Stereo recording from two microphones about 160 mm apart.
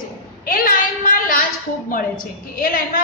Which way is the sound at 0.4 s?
60° left (ahead or behind).